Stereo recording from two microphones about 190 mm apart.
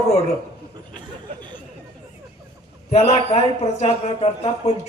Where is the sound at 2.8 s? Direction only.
35° left (ahead or behind).